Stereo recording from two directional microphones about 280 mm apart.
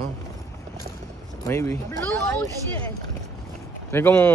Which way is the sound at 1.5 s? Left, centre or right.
Centre.